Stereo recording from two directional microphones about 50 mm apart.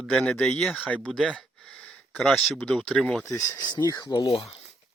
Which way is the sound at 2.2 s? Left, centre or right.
Centre.